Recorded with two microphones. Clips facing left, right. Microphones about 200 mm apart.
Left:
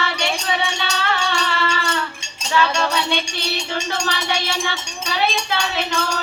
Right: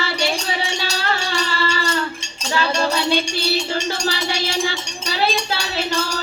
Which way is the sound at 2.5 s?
35° right (ahead or behind).